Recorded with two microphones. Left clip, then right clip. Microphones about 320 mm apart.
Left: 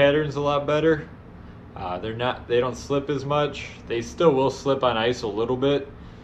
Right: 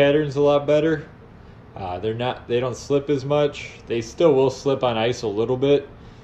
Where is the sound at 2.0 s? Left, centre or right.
Centre.